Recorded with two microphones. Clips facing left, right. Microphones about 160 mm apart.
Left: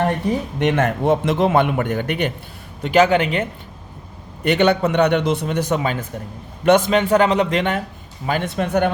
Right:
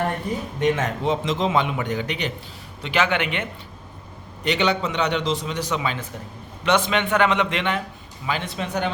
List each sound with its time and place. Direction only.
0.6 s a man's voice: 60° left (ahead or behind)
2.8 s a man's voice: 40° left (ahead or behind)
4.4 s a man's voice: 55° left (ahead or behind)